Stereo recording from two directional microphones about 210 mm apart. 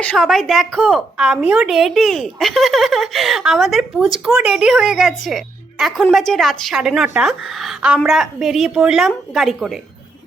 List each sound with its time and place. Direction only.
0.0 s a woman's voice: 5° left (ahead or behind)